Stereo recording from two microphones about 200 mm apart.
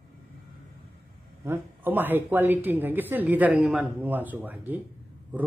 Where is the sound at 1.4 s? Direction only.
10° right (ahead or behind).